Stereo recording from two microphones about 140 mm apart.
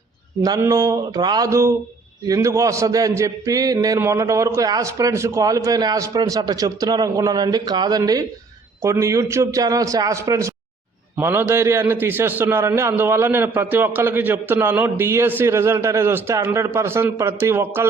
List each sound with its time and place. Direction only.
0.4 s a man's voice: 25° right (ahead or behind)